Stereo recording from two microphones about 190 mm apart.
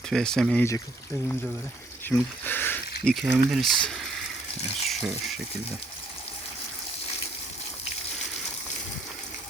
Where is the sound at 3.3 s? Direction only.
10° right (ahead or behind).